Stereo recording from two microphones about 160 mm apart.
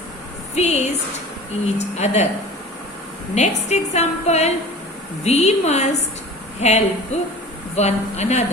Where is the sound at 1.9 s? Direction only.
45° left (ahead or behind).